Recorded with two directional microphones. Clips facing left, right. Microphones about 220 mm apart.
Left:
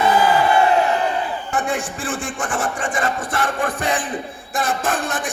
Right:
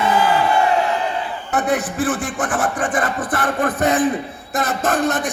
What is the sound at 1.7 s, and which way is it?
Speech, 30° left (ahead or behind).